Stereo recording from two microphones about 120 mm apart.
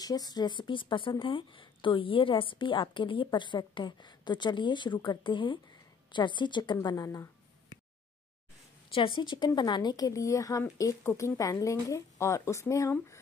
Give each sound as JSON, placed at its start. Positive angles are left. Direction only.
{"t": 0.0, "sound": "a woman's voice", "side_deg": 35}
{"t": 8.9, "sound": "speech", "side_deg": 45}